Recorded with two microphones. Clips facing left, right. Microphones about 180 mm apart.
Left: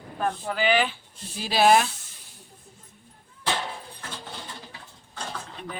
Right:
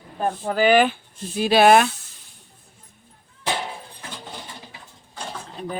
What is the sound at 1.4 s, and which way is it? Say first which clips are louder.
Speech: right 5 dB; 60° right (ahead or behind).